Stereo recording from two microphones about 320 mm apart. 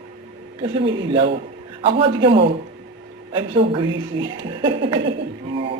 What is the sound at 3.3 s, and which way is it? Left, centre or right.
Speech, centre.